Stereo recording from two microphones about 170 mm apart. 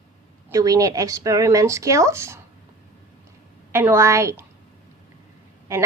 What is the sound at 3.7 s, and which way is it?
Speech, 15° right (ahead or behind).